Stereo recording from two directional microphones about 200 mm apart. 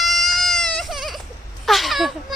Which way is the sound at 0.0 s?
Centre (ahead or behind).